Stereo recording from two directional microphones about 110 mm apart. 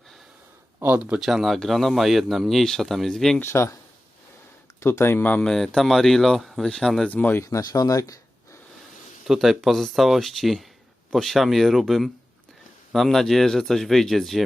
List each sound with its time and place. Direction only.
0.9 s speech: 10° right (ahead or behind)
3.4 s speech: 25° left (ahead or behind)
4.8 s speech: 25° left (ahead or behind); by 7.1 s 5° left (ahead or behind)
7.1 s speech: 15° left (ahead or behind)
7.4 s speech: 30° left (ahead or behind)
9.2 s speech: 5° right (ahead or behind)